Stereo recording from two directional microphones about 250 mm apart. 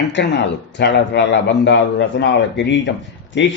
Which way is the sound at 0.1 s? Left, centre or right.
Left.